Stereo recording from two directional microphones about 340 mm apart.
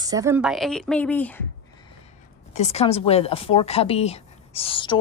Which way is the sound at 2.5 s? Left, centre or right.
Centre.